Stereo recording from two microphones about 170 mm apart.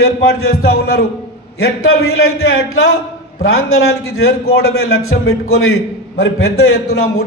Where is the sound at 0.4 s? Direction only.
70° left (ahead or behind).